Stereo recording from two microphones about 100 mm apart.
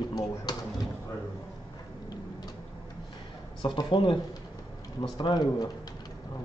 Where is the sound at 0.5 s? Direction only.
40° left (ahead or behind).